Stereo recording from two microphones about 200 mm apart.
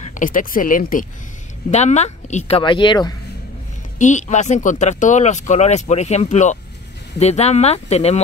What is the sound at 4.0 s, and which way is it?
Speech, 35° left (ahead or behind).